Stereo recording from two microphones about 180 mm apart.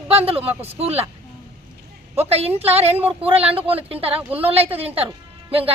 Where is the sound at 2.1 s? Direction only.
35° right (ahead or behind).